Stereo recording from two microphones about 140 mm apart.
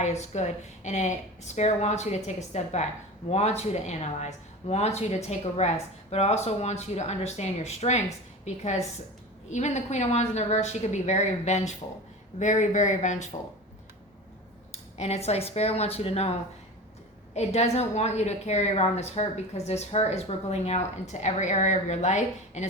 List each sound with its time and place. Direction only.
0.0 s a woman's voice: 55° left (ahead or behind)
14.7 s speech: 50° left (ahead or behind)
17.3 s a woman's voice: 50° left (ahead or behind)